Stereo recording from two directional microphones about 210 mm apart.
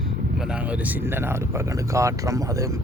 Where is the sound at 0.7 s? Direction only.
10° right (ahead or behind).